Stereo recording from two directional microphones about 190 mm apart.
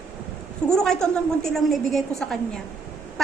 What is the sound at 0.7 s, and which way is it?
A woman's voice, 5° left (ahead or behind).